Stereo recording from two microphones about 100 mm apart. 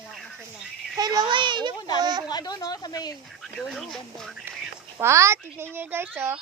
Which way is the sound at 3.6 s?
Centre (ahead or behind).